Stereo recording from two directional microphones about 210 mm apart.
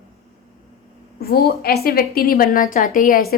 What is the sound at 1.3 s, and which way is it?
A woman's voice, 45° left (ahead or behind).